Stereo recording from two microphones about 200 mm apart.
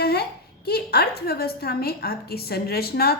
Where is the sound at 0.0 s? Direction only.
50° left (ahead or behind).